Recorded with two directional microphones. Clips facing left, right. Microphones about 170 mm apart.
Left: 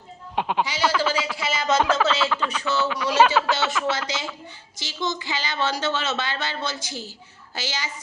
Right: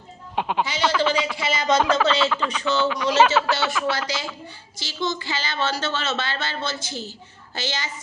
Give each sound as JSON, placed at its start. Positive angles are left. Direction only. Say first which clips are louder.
{"t": 0.3, "sound": "speech", "louder": "even", "side_deg": 0}
{"t": 3.9, "sound": "a woman's voice", "louder": "right 1 dB", "side_deg": 20}